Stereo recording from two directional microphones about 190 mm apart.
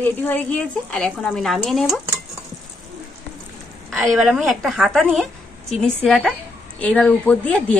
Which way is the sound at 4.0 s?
Centre (ahead or behind).